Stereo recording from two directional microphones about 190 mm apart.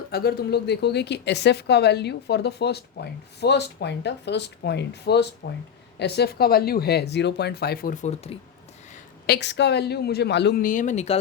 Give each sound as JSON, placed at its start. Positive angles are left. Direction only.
{"t": 0.1, "sound": "speech", "side_deg": 55}
{"t": 9.2, "sound": "speech", "side_deg": 60}